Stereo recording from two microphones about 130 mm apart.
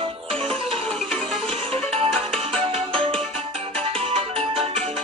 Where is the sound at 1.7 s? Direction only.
45° right (ahead or behind).